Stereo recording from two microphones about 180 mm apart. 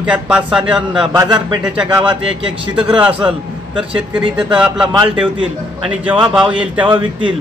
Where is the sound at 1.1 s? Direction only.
25° right (ahead or behind).